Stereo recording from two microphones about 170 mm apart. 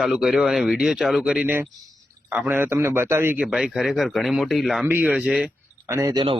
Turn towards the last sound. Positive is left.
turn(degrees=-25)  # may be behind; listen again after turning